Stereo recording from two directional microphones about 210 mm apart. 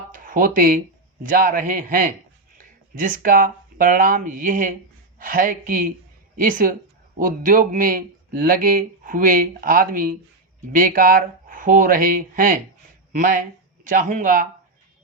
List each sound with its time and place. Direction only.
0.1 s speech: 40° right (ahead or behind)
13.8 s speech: 35° right (ahead or behind)